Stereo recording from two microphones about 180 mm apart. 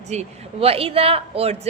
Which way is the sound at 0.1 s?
35° right (ahead or behind).